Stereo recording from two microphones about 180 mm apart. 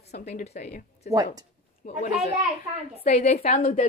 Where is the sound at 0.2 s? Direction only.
40° left (ahead or behind).